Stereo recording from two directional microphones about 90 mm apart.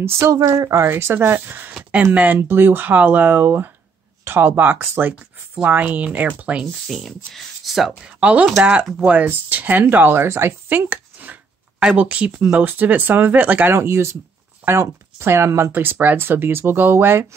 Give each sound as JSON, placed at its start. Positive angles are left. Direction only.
{"t": 0.0, "sound": "speech", "side_deg": -35}
{"t": 0.4, "sound": "speech", "side_deg": -45}
{"t": 0.8, "sound": "speech", "side_deg": -25}
{"t": 1.7, "sound": "a sound", "side_deg": -15}
{"t": 2.1, "sound": "speech", "side_deg": -20}
{"t": 6.9, "sound": "speech", "side_deg": 0}
{"t": 8.5, "sound": "speech", "side_deg": -5}
{"t": 9.0, "sound": "speech", "side_deg": -15}
{"t": 13.7, "sound": "speech", "side_deg": -30}